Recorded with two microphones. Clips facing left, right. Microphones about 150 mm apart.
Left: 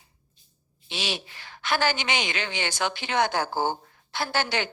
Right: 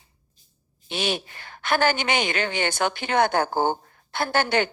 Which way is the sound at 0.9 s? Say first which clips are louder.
Right 6 dB; 50° right (ahead or behind).